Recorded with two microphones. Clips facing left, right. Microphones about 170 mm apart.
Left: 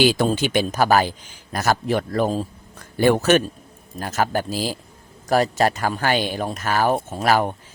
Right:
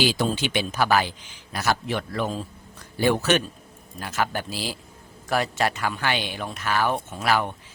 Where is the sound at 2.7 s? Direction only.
50° left (ahead or behind).